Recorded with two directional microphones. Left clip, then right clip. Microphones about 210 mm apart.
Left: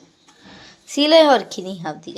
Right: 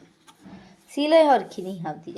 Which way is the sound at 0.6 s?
5° left (ahead or behind).